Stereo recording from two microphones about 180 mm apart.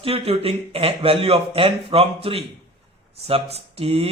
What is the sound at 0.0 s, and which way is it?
A man's voice, 30° right (ahead or behind).